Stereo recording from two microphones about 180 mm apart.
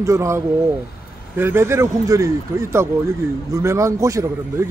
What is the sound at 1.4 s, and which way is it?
A man's voice, 15° right (ahead or behind).